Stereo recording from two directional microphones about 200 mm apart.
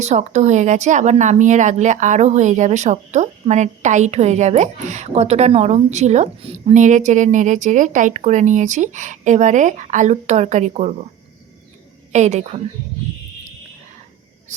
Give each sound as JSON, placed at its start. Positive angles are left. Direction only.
{"t": 0.0, "sound": "speech", "side_deg": -35}
{"t": 12.1, "sound": "speech", "side_deg": -35}